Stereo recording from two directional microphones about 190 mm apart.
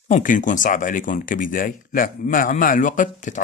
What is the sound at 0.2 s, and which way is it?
A man's voice, 45° left (ahead or behind).